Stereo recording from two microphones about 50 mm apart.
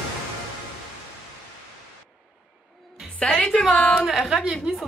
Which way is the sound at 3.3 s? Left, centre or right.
Centre.